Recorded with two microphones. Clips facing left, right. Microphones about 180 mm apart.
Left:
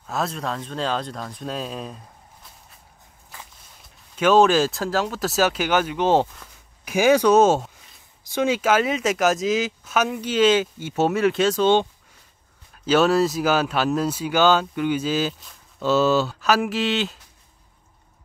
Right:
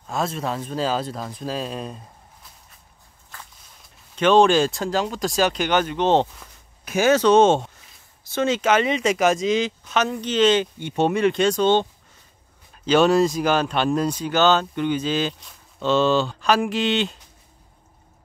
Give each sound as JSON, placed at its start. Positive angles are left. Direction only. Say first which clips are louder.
{"t": 0.0, "sound": "speech", "louder": "right 1 dB", "side_deg": 0}
{"t": 4.1, "sound": "speech", "louder": "right 1 dB", "side_deg": 5}